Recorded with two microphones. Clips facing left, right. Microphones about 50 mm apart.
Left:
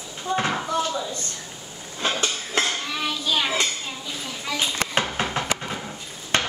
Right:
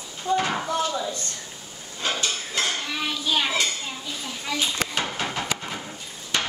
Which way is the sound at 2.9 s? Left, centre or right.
Centre.